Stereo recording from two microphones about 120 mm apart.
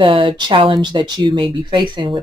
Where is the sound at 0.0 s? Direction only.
45° right (ahead or behind).